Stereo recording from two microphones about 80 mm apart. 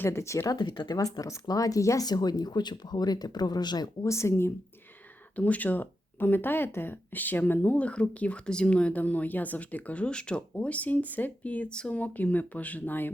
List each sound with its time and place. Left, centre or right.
0.1 s speech: left
0.5 s speech: left
0.9 s speech: left
2.0 s speech: left
4.0 s speech: left
5.4 s speech: centre